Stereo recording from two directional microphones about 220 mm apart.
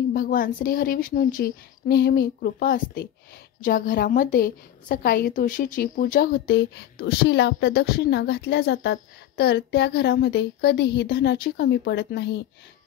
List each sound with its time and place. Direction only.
0.1 s a woman's voice: 40° left (ahead or behind)